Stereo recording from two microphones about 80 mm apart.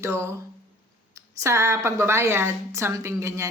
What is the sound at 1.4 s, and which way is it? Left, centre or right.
A woman's voice, right.